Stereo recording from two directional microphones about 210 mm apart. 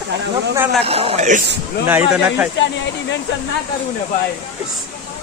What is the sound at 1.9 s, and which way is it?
Speech, 5° right (ahead or behind).